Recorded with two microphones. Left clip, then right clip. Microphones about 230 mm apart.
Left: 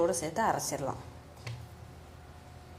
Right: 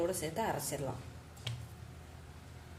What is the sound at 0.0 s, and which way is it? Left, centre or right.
Speech, centre.